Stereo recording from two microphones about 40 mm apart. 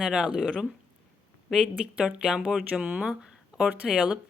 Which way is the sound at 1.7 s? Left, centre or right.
Right.